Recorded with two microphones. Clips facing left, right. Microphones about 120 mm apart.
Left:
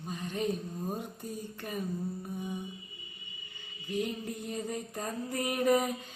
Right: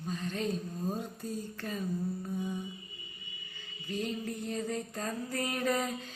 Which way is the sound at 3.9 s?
15° left (ahead or behind).